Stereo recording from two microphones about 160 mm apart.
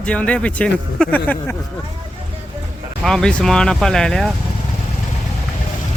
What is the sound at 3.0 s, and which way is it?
A man's voice, 5° left (ahead or behind).